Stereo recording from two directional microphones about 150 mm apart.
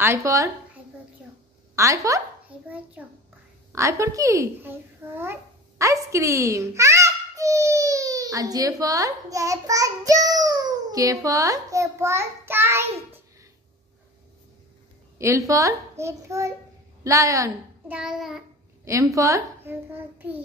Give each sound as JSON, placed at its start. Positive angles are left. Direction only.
{"t": 0.0, "sound": "a child's voice", "side_deg": -20}
{"t": 1.8, "sound": "a child's voice", "side_deg": -20}
{"t": 3.0, "sound": "a child's voice", "side_deg": -10}
{"t": 15.1, "sound": "a child's voice", "side_deg": -20}
{"t": 17.8, "sound": "child singing", "side_deg": -5}
{"t": 19.1, "sound": "a child's voice", "side_deg": -20}